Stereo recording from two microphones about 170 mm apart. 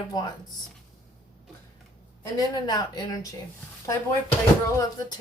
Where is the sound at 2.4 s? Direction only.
20° left (ahead or behind).